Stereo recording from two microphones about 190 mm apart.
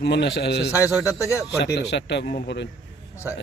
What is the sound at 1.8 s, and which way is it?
Speech, 65° left (ahead or behind).